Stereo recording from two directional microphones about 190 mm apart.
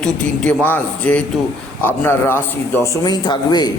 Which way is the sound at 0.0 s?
10° left (ahead or behind).